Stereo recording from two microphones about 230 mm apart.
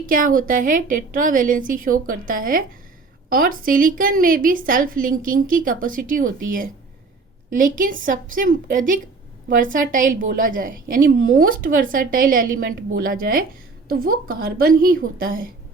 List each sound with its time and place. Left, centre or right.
0.1 s a woman's voice: right